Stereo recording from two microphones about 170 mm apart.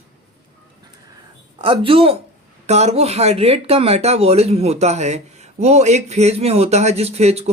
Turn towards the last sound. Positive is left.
turn(degrees=-40)  # may be behind; listen again after turning